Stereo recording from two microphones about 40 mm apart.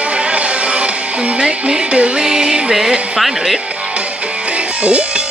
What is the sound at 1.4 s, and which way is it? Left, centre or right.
Music, right.